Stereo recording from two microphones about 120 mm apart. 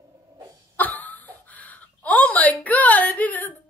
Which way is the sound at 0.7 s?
15° left (ahead or behind).